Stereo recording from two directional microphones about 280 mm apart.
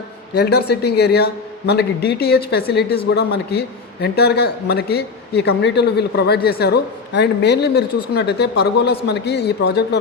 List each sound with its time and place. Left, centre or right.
0.3 s a man's voice: left